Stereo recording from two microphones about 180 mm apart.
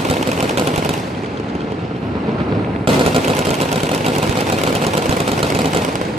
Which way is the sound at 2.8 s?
30° right (ahead or behind).